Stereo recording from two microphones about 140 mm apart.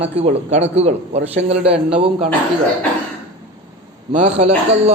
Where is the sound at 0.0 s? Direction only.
50° right (ahead or behind).